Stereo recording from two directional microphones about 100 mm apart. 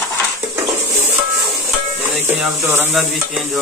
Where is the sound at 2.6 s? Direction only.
20° right (ahead or behind).